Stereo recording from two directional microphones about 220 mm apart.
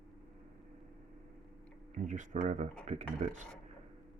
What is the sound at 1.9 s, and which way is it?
Speech, 35° right (ahead or behind).